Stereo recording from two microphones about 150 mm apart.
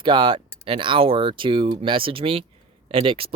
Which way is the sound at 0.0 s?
35° right (ahead or behind).